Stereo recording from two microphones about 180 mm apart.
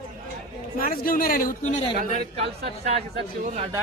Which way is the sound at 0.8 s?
50° left (ahead or behind).